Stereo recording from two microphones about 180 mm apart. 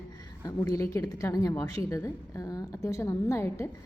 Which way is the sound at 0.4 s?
20° left (ahead or behind).